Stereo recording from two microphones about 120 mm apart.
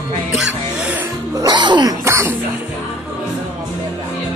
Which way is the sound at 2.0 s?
25° right (ahead or behind).